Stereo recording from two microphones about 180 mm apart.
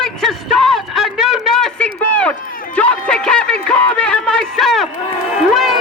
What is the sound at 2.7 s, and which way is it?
Music, 5° left (ahead or behind).